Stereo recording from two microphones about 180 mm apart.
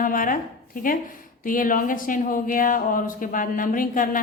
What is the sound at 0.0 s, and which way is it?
Speech, 50° left (ahead or behind).